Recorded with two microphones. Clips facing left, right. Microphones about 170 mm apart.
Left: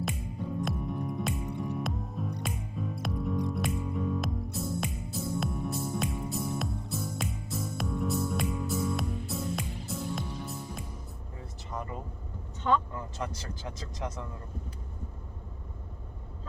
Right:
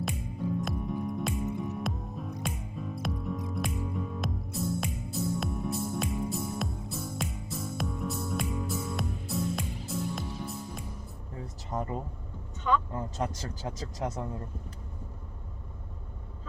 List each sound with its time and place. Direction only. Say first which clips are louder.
0.0 s music: right 1 dB; centre (ahead or behind)
11.7 s a sound: right 4 dB; 30° right (ahead or behind)
12.9 s speech: right 4 dB; 35° right (ahead or behind)